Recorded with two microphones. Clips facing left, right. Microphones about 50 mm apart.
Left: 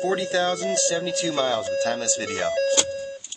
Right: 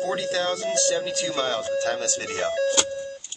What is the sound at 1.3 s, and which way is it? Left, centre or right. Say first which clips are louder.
Speech: left 3 dB; centre.